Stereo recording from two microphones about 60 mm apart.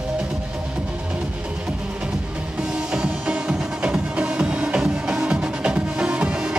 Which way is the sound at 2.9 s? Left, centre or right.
Centre.